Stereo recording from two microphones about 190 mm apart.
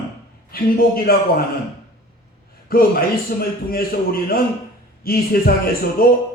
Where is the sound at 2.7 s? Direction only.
50° left (ahead or behind).